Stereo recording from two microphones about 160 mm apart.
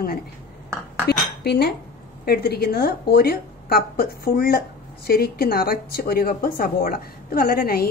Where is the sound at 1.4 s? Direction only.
90° left.